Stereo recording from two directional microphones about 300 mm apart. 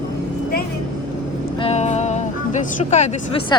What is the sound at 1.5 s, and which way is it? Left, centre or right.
Speech, centre.